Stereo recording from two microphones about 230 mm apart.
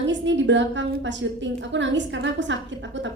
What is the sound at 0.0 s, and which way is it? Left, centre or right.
A woman's voice, right.